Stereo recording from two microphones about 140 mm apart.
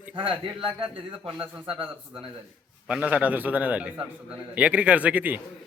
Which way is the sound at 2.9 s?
10° right (ahead or behind).